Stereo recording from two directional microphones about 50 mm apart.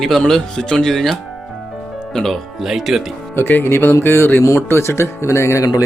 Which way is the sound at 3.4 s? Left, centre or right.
Left.